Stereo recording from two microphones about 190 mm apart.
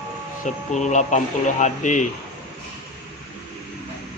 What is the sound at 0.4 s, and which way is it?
Speech, 40° left (ahead or behind).